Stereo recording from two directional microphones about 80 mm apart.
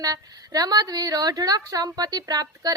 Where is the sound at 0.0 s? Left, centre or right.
Right.